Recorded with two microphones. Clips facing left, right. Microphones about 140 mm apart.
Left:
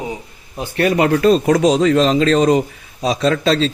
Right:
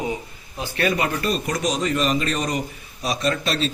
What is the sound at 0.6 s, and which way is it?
A man's voice, 65° left (ahead or behind).